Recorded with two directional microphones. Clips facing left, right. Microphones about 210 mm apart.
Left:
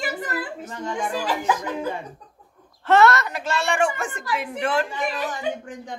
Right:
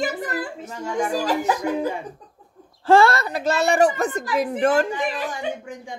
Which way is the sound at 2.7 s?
30° right (ahead or behind).